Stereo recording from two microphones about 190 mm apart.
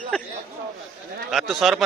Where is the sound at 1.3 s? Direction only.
Centre (ahead or behind).